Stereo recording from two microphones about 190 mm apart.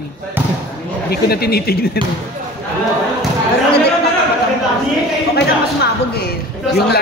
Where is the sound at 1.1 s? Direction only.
55° left (ahead or behind).